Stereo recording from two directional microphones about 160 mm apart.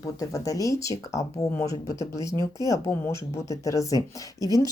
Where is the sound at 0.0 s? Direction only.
20° left (ahead or behind).